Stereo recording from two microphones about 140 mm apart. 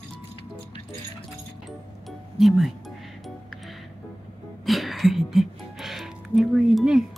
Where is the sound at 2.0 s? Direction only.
Centre (ahead or behind).